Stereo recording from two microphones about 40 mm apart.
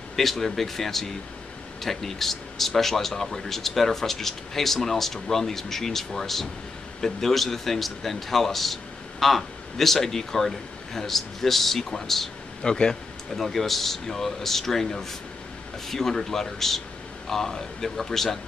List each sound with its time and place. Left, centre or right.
0.1 s a man's voice: centre
12.6 s speech: left
13.4 s speech: centre